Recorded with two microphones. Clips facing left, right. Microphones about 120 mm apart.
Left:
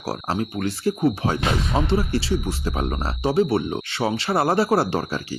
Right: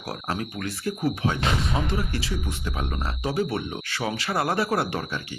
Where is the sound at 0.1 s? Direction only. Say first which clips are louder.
Left 5 dB; 30° left (ahead or behind).